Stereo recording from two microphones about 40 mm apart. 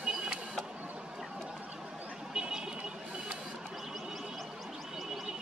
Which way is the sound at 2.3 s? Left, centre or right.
Centre.